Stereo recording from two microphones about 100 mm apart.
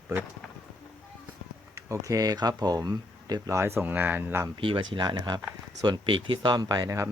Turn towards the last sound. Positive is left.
turn(degrees=-35)  # may be behind; listen again after turning